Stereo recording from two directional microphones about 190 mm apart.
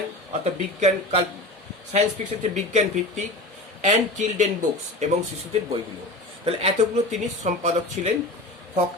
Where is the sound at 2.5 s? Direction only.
40° right (ahead or behind).